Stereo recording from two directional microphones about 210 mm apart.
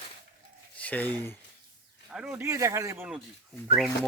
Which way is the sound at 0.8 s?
5° left (ahead or behind).